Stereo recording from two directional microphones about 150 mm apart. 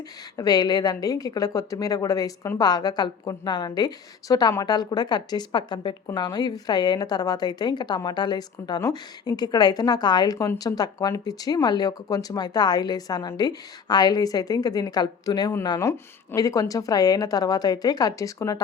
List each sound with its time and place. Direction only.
0.3 s a woman's voice: 25° left (ahead or behind)